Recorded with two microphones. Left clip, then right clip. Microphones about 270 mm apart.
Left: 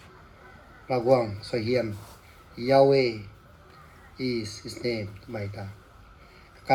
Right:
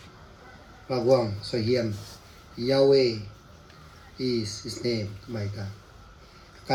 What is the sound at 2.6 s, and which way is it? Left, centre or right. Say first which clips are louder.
Speech: left 1 dB; left.